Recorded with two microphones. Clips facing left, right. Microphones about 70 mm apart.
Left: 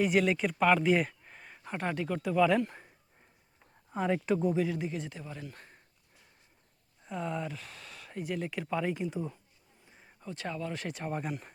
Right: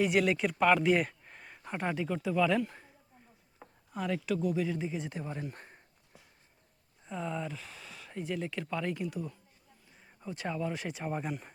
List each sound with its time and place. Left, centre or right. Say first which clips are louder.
0.0 s speech: even; centre
3.9 s speech: left 3 dB; left
4.7 s speech: even; centre
5.0 s a sound: right 4 dB; right
7.0 s speech: left 1 dB; centre; by 9.4 s left
10.2 s speech: right 2 dB; centre